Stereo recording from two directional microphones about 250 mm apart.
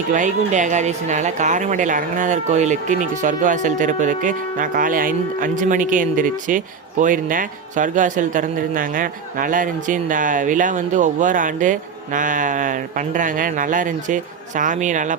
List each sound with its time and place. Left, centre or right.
0.1 s speech: right